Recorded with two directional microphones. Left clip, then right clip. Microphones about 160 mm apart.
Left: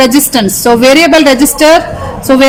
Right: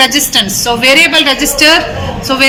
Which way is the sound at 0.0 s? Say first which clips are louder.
Left 1 dB; 90° left.